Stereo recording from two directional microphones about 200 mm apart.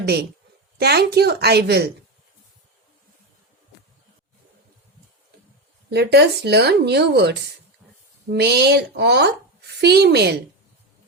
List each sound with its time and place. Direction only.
0.0 s a woman's voice: 55° right (ahead or behind)
5.9 s speech: 55° right (ahead or behind)